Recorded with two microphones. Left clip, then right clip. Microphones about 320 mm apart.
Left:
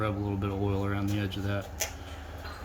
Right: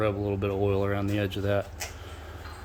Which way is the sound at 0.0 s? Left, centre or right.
Centre.